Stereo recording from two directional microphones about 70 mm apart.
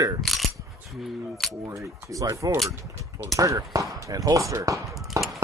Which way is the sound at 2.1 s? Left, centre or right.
Right.